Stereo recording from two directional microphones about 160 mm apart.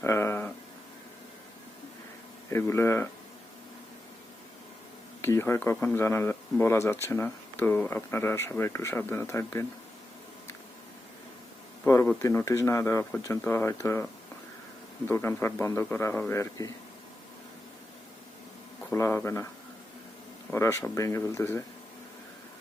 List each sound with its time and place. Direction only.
0.0 s a sound: 15° left (ahead or behind)
2.5 s speech: 15° left (ahead or behind)
5.2 s speech: 15° left (ahead or behind)
11.9 s speech: 15° left (ahead or behind)
18.9 s speech: 15° left (ahead or behind)
20.5 s speech: 15° left (ahead or behind)